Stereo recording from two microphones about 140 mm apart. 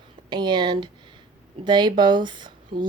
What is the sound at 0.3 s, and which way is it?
Speech, 30° right (ahead or behind).